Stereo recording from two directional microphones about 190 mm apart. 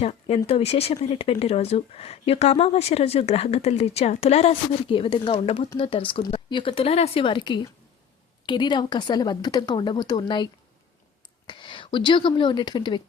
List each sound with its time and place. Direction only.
0.0 s a woman's voice: 35° left (ahead or behind)